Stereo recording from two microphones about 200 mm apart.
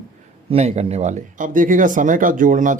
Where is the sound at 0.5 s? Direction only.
30° right (ahead or behind).